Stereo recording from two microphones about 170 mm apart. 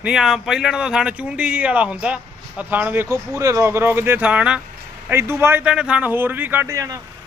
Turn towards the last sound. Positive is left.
turn(degrees=-20)  # may be behind; listen again after turning